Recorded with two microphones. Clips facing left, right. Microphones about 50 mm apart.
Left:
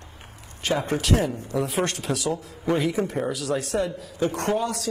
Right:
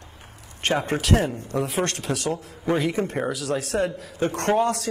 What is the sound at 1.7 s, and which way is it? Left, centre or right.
Speech, centre.